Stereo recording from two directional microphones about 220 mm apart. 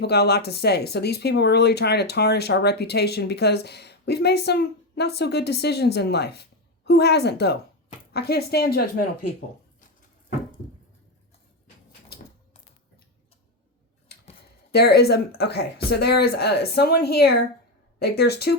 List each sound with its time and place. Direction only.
0.0 s speech: 45° left (ahead or behind)
14.7 s speech: 45° left (ahead or behind)